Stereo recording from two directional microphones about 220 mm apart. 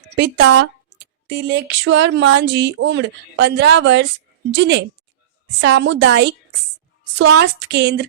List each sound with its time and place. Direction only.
0.1 s speech: 55° right (ahead or behind)